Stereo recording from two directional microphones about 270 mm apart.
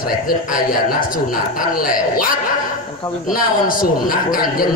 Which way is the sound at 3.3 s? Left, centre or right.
Left.